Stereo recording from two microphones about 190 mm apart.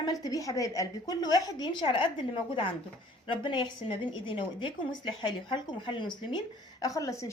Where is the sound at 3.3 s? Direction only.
25° left (ahead or behind).